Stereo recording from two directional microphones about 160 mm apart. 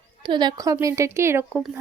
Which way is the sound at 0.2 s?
30° right (ahead or behind).